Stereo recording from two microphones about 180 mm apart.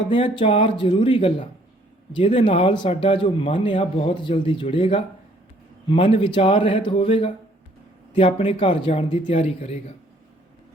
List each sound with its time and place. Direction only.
0.1 s speech: 30° left (ahead or behind)